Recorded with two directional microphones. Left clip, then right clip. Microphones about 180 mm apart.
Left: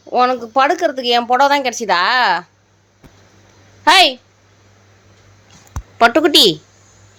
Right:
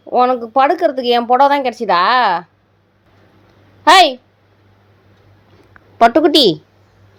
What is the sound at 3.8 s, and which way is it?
Speech, 15° right (ahead or behind).